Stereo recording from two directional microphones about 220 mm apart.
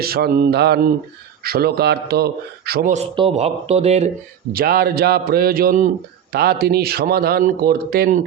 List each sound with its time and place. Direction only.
0.0 s a man's voice: 45° right (ahead or behind)
4.5 s speech: 45° right (ahead or behind)